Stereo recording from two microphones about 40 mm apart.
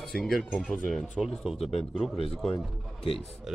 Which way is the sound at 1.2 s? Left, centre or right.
Centre.